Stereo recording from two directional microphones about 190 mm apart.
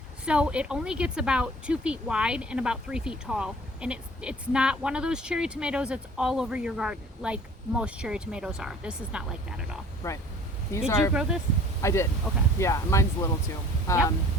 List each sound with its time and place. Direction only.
0.3 s a woman's voice: 5° right (ahead or behind)
10.0 s speech: 15° left (ahead or behind)
11.1 s a woman's voice: 5° right (ahead or behind)
11.8 s speech: 15° left (ahead or behind)